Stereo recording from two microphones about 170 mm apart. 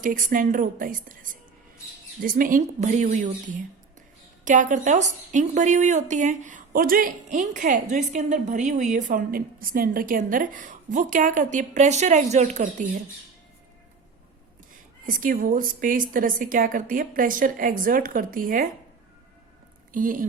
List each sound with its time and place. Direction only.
0.0 s a woman's voice: 50° right (ahead or behind)
4.4 s a woman's voice: 50° right (ahead or behind)
14.7 s a woman's voice: 55° right (ahead or behind)
19.9 s a woman's voice: 50° right (ahead or behind)